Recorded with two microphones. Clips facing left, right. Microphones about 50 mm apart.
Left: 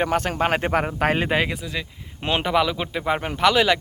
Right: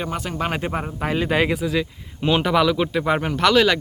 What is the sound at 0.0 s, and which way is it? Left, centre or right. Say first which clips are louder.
Speech: left 5 dB; left.